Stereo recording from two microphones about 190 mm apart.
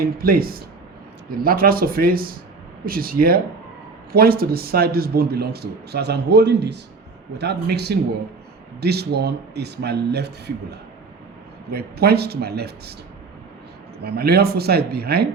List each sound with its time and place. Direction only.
0.0 s a man's voice: 50° right (ahead or behind)
14.0 s a man's voice: 55° right (ahead or behind)